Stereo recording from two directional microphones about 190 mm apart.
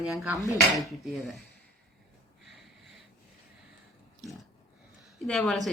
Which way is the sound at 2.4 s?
Centre (ahead or behind).